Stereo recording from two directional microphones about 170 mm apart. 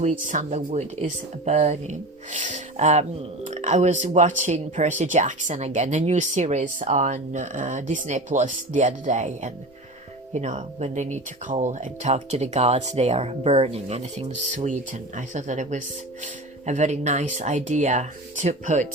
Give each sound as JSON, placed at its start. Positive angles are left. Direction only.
{"t": 0.0, "sound": "speech", "side_deg": -45}
{"t": 0.7, "sound": "speech", "side_deg": -40}